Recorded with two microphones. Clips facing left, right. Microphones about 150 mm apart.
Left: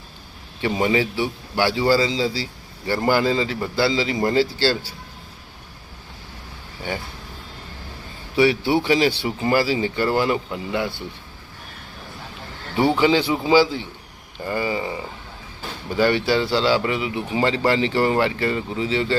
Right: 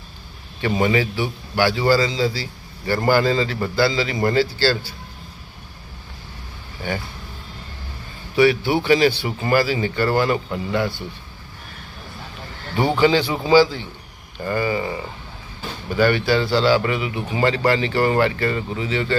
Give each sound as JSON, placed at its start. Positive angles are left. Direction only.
{"t": 0.6, "sound": "a man's voice", "side_deg": 20}
{"t": 8.4, "sound": "a man's voice", "side_deg": 25}
{"t": 13.0, "sound": "a man's voice", "side_deg": 20}